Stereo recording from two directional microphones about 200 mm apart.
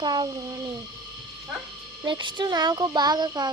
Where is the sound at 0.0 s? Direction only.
20° right (ahead or behind).